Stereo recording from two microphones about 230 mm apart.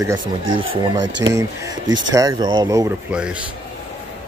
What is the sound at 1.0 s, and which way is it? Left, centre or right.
Speech, right.